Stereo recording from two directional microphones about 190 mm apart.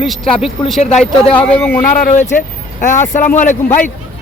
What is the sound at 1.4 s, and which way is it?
Speech, 5° left (ahead or behind).